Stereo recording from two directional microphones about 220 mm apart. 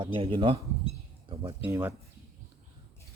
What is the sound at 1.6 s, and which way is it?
Speech, 10° right (ahead or behind).